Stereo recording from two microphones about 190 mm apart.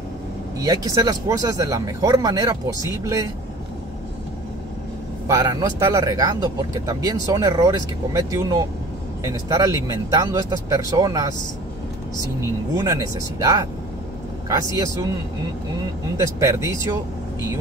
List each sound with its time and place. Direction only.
0.6 s speech: 20° right (ahead or behind)
5.3 s speech: 20° right (ahead or behind)
16.3 s speech: 15° right (ahead or behind)